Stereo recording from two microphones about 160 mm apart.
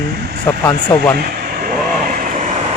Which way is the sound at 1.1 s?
65° right (ahead or behind).